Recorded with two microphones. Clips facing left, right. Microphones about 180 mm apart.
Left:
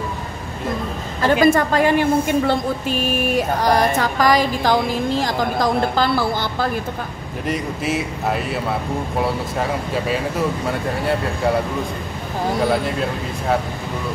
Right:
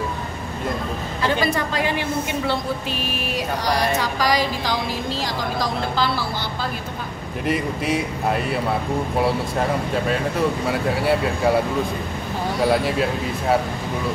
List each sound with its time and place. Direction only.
1.2 s a woman's voice: 50° left (ahead or behind)
7.4 s speech: centre (ahead or behind)
12.5 s speech: centre (ahead or behind)